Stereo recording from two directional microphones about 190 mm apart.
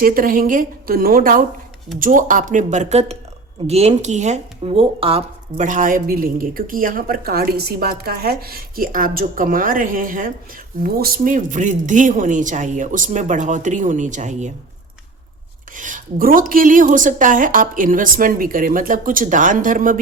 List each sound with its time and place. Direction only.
0.0 s speech: 50° right (ahead or behind)
15.7 s speech: 45° right (ahead or behind)